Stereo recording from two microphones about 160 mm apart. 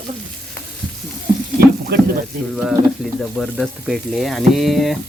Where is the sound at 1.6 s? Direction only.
80° right.